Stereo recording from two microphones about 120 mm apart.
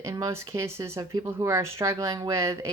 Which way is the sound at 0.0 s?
25° right (ahead or behind).